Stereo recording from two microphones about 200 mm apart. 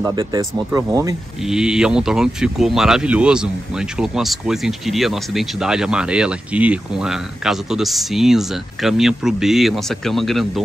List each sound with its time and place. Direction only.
0.0 s speech: 20° right (ahead or behind)
1.5 s speech: 5° right (ahead or behind)